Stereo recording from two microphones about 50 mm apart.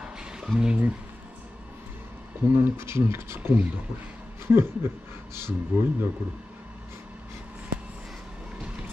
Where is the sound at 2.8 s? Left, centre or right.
Right.